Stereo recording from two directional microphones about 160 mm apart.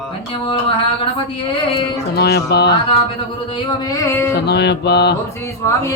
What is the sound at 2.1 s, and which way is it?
Mantra, 85° left.